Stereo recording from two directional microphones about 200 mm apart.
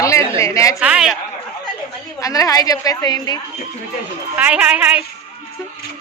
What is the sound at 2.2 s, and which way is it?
A woman's voice, 15° left (ahead or behind).